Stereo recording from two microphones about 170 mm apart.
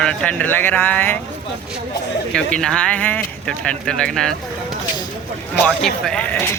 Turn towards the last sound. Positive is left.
turn(degrees=10)  # may be behind; listen again after turning